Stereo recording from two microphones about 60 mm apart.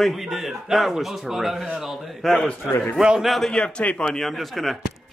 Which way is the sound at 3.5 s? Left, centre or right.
Centre.